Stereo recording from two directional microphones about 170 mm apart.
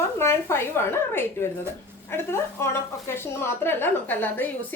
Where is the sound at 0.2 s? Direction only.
15° left (ahead or behind).